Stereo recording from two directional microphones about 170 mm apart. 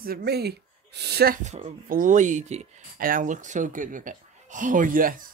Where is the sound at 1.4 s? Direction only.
40° right (ahead or behind).